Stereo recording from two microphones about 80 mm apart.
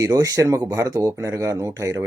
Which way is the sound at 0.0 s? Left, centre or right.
Right.